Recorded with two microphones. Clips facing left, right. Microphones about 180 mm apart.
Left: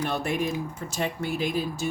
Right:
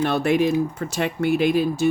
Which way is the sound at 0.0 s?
75° right (ahead or behind).